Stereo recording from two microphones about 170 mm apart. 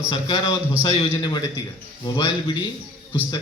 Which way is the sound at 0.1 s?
25° left (ahead or behind).